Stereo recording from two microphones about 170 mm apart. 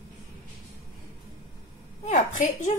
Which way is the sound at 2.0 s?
45° left (ahead or behind).